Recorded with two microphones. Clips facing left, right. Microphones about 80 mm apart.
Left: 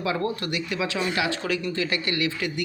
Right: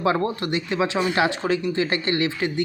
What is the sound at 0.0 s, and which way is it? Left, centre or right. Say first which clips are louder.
Speech: right 4 dB; right.